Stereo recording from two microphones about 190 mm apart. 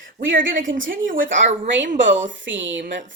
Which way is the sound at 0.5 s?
45° right (ahead or behind).